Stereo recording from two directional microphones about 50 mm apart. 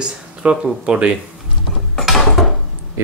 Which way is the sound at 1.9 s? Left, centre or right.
Centre.